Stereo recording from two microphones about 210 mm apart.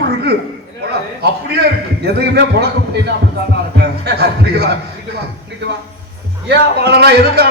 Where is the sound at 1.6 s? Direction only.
50° right (ahead or behind).